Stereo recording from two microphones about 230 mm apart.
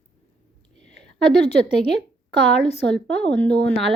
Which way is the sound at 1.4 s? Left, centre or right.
Left.